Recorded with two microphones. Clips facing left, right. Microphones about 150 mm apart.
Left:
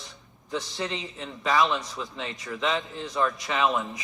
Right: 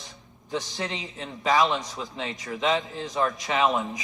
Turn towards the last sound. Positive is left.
turn(degrees=-20)  # may be behind; listen again after turning